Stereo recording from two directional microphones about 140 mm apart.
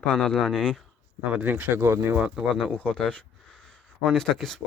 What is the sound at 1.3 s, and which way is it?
Speech, 10° right (ahead or behind).